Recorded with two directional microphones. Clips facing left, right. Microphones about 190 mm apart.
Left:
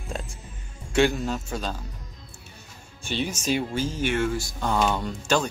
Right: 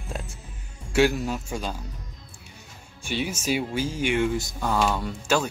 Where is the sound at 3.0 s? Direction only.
10° right (ahead or behind).